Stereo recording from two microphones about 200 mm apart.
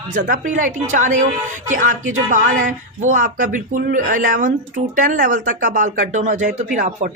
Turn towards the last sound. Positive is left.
turn(degrees=-40)  # may be behind; listen again after turning